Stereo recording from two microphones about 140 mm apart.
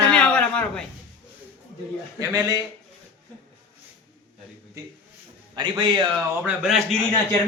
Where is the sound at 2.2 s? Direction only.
25° right (ahead or behind).